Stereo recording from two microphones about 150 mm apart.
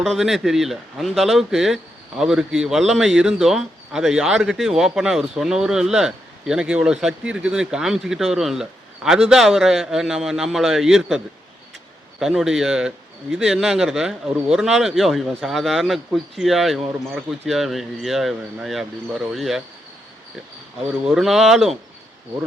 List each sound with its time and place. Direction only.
0.0 s speech: centre (ahead or behind)
12.2 s speech: 5° right (ahead or behind)
21.0 s speech: centre (ahead or behind)